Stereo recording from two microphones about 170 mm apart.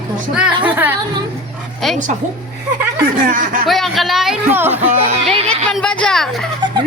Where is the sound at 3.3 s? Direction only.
50° right (ahead or behind).